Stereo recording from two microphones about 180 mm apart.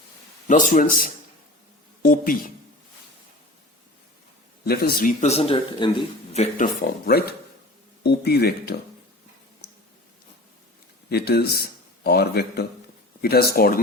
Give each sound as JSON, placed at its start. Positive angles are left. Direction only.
{"t": 0.4, "sound": "a man's voice", "side_deg": 45}
{"t": 4.6, "sound": "a man's voice", "side_deg": 60}
{"t": 7.0, "sound": "speech", "side_deg": 60}
{"t": 9.6, "sound": "tick", "side_deg": 65}
{"t": 11.1, "sound": "speech", "side_deg": 60}